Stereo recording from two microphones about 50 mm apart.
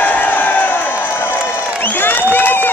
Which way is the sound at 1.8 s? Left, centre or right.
Left.